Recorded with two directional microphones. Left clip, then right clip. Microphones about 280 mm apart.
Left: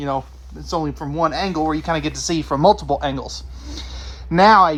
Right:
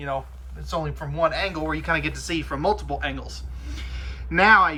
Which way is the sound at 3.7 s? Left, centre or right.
Centre.